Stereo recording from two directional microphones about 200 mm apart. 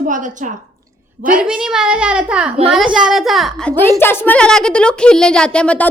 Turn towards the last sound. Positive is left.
turn(degrees=5)  # may be behind; listen again after turning